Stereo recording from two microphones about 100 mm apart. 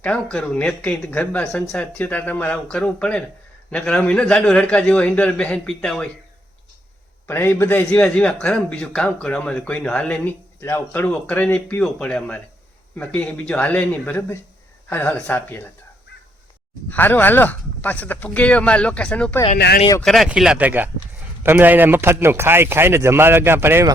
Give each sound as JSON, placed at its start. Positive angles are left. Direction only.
{"t": 0.0, "sound": "a man's voice", "side_deg": 10}
{"t": 7.3, "sound": "a man's voice", "side_deg": 25}
{"t": 10.6, "sound": "a man's voice", "side_deg": 25}
{"t": 16.9, "sound": "a man's voice", "side_deg": 20}
{"t": 20.2, "sound": "a man's voice", "side_deg": -5}